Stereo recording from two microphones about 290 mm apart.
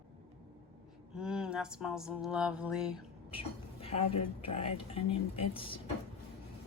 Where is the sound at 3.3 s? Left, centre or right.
Centre.